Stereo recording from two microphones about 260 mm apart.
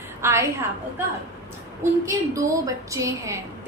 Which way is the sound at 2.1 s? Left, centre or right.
Centre.